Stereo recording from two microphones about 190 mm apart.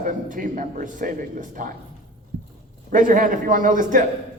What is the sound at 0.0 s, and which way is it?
A man's voice, 45° right (ahead or behind).